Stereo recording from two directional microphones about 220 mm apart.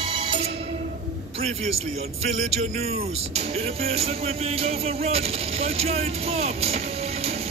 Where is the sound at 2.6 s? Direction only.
30° right (ahead or behind).